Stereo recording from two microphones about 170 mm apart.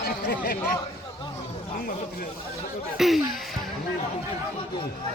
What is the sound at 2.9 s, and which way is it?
Speech, centre (ahead or behind).